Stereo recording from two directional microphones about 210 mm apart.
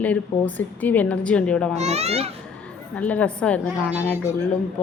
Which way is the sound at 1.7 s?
30° right (ahead or behind).